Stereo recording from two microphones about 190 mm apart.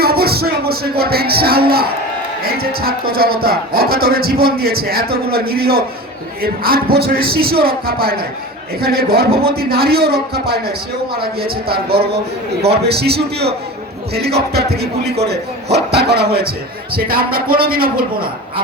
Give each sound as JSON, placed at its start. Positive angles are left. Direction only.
{"t": 0.0, "sound": "speech", "side_deg": -55}